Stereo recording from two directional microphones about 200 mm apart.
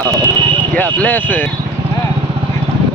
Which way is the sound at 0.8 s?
10° left (ahead or behind).